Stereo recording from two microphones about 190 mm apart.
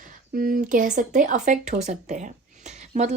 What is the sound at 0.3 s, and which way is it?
Speech, 50° right (ahead or behind).